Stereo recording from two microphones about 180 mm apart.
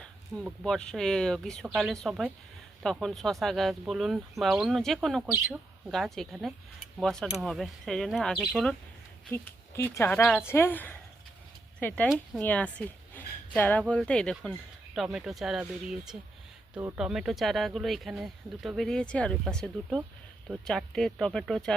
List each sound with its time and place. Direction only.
0.6 s speech: 5° left (ahead or behind)